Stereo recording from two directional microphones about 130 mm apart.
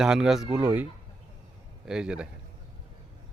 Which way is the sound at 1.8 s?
5° right (ahead or behind).